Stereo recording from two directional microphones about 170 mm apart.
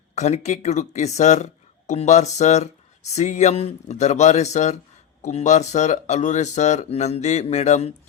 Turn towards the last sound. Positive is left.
turn(degrees=45)  # may be behind; listen again after turning